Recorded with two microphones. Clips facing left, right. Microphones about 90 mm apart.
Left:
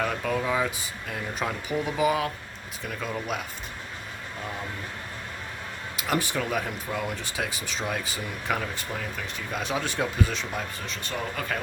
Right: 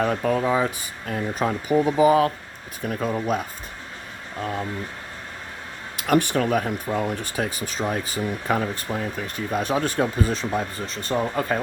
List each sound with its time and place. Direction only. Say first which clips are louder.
0.0 s speech: right 6 dB; 40° right (ahead or behind)
6.0 s speech: right 7 dB; 55° right (ahead or behind); by 11.6 s 30° right (ahead or behind)